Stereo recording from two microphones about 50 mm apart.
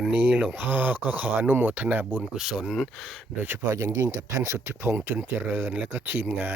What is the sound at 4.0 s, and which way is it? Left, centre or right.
Speech, right.